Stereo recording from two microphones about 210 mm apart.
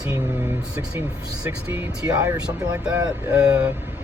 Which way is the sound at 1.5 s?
10° right (ahead or behind).